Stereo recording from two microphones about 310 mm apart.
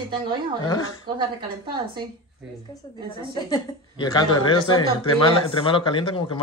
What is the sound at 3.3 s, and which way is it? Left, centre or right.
A man's voice, centre.